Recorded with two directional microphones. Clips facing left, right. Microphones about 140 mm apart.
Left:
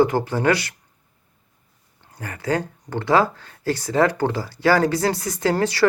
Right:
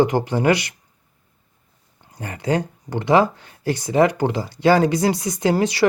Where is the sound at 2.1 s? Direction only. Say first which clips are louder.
Right 2 dB; 20° right (ahead or behind).